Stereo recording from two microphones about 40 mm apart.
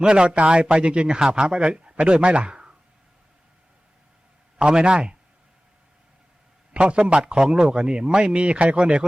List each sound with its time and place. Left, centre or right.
0.0 s speech: right
4.5 s speech: right
6.7 s speech: right